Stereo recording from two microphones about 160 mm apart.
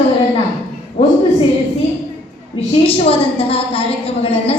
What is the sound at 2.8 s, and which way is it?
A woman's voice, 35° left (ahead or behind).